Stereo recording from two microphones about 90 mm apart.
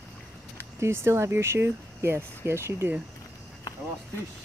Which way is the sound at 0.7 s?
30° right (ahead or behind).